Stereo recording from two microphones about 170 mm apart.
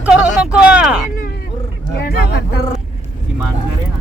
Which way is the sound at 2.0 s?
75° left (ahead or behind).